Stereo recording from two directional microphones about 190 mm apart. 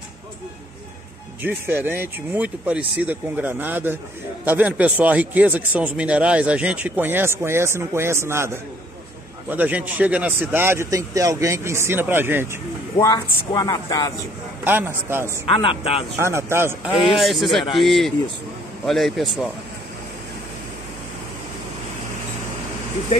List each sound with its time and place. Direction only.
1.4 s speech: 10° right (ahead or behind)
13.0 s a woman's voice: 20° left (ahead or behind)
14.6 s speech: 10° right (ahead or behind)
15.4 s a woman's voice: 30° left (ahead or behind)
16.2 s speech: 15° right (ahead or behind)
17.2 s speech: centre (ahead or behind)